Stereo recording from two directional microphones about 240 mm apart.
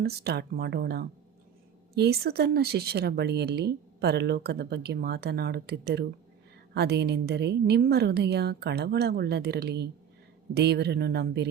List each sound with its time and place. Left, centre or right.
0.0 s speech: right